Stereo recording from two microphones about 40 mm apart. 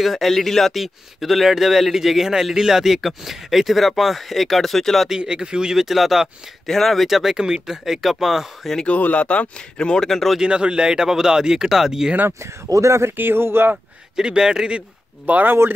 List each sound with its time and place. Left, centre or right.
0.0 s a man's voice: centre
5.1 s speech: right
6.7 s a man's voice: centre
7.1 s speech: centre
9.1 s speech: left
10.0 s speech: centre
10.4 s speech: right
13.1 s speech: right
14.1 s a man's voice: centre
15.2 s speech: right